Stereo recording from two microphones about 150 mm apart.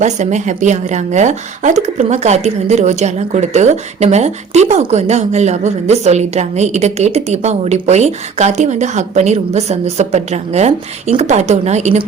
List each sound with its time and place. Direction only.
0.0 s speech: 50° right (ahead or behind)